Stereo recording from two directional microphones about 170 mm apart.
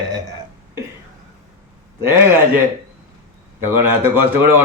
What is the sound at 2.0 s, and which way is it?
Speech, 15° right (ahead or behind).